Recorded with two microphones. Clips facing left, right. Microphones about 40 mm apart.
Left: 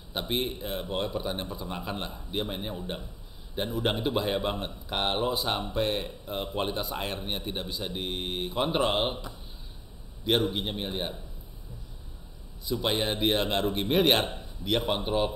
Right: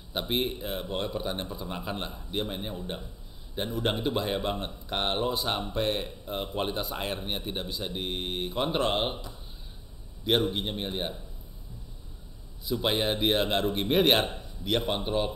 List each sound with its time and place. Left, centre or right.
0.1 s speech: centre
10.2 s speech: centre
12.6 s speech: centre